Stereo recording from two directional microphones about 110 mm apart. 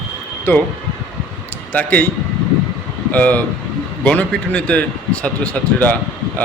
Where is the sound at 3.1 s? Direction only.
15° left (ahead or behind).